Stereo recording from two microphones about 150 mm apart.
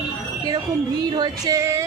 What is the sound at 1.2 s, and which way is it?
Female singing, 25° right (ahead or behind).